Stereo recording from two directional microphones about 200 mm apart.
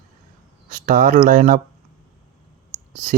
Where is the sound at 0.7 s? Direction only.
40° right (ahead or behind).